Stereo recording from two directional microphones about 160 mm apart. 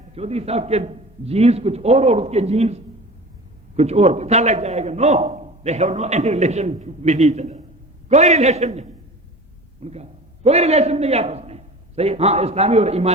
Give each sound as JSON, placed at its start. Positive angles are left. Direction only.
{"t": 0.1, "sound": "a man's voice", "side_deg": -40}